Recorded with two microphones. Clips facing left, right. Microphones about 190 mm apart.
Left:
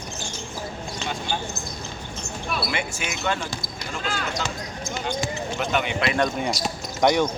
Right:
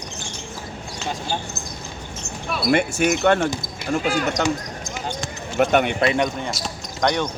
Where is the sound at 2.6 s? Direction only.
50° right (ahead or behind).